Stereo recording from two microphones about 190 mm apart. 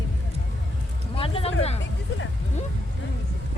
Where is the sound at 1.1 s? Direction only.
30° left (ahead or behind).